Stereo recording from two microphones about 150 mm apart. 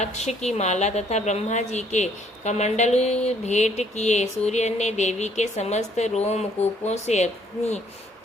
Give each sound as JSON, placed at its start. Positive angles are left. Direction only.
{"t": 0.0, "sound": "speech", "side_deg": 45}